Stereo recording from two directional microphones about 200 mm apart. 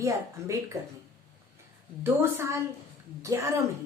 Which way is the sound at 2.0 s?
10° right (ahead or behind).